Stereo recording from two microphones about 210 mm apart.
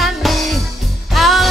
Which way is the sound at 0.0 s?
Centre (ahead or behind).